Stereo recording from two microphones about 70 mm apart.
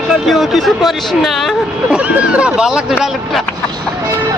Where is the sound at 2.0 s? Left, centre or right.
Centre.